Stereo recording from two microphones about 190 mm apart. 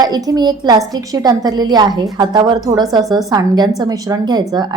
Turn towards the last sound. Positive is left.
turn(degrees=-20)  # may be behind; listen again after turning